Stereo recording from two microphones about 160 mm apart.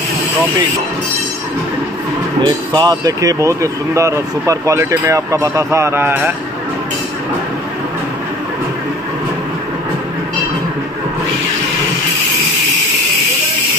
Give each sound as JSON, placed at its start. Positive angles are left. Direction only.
{"t": 2.4, "sound": "speech", "side_deg": -25}